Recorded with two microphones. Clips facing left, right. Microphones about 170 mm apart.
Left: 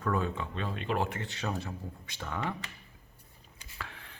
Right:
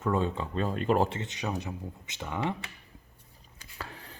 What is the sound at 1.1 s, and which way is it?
Speech, 20° right (ahead or behind).